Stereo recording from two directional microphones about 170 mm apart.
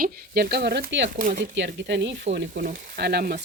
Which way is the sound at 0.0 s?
70° right (ahead or behind).